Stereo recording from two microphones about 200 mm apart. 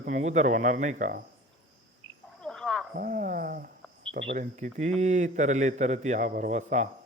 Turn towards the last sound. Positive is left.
turn(degrees=-35)  # may be behind; listen again after turning